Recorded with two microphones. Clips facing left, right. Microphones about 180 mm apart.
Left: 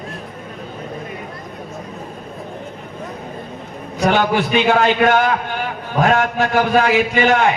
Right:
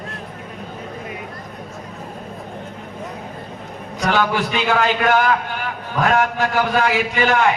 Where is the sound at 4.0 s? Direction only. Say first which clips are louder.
Left 3 dB; 25° left (ahead or behind).